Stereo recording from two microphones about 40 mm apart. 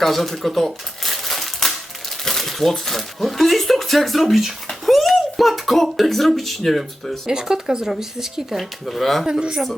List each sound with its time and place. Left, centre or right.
0.0 s typewriter: centre
2.2 s speech: centre
7.3 s speech: centre
8.5 s speech: centre
9.2 s speech: right